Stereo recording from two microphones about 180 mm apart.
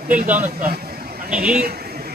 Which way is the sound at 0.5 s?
55° right (ahead or behind).